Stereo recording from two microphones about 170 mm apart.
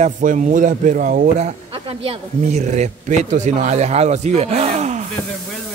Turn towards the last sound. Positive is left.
turn(degrees=-45)  # may be behind; listen again after turning